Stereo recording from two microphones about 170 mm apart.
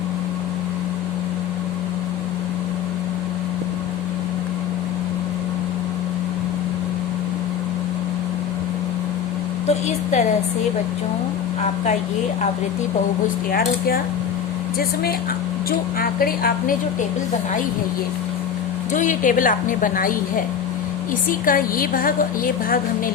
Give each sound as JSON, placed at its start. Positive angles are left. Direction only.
{"t": 9.6, "sound": "a woman's voice", "side_deg": 40}
{"t": 13.5, "sound": "a woman's voice", "side_deg": 65}
{"t": 16.0, "sound": "a woman's voice", "side_deg": 60}
{"t": 18.9, "sound": "a woman's voice", "side_deg": 50}